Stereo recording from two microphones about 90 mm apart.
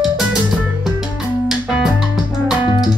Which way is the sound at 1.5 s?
5° right (ahead or behind).